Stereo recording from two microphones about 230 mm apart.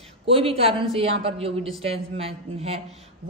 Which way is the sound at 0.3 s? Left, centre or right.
Right.